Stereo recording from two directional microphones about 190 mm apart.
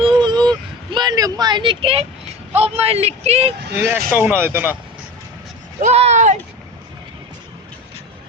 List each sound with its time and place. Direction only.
0.2 s a sound: 20° right (ahead or behind)
0.9 s vehicle: 20° right (ahead or behind)
2.6 s speech: 30° right (ahead or behind)
3.8 s speech: 10° right (ahead or behind)
5.8 s speech: 35° right (ahead or behind)